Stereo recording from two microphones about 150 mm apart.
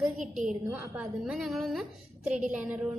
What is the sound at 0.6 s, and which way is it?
A woman's voice, 5° right (ahead or behind).